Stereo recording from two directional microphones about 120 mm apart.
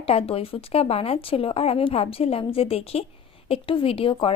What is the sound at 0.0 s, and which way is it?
Speech, 55° left (ahead or behind).